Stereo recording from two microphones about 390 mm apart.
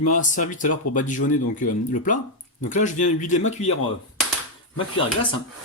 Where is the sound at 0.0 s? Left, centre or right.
Centre.